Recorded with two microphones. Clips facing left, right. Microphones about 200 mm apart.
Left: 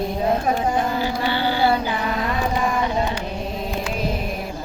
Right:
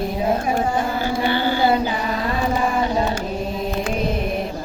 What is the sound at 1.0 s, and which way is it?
Music, 50° right (ahead or behind).